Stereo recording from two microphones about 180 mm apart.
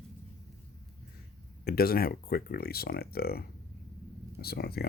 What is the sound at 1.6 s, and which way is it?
Speech, 55° left (ahead or behind).